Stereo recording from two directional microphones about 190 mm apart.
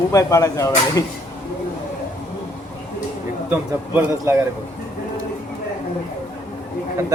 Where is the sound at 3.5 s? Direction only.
10° right (ahead or behind).